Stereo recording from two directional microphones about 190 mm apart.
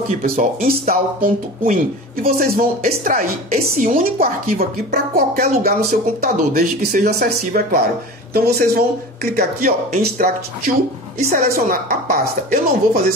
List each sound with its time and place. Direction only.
0.2 s speech: 45° right (ahead or behind)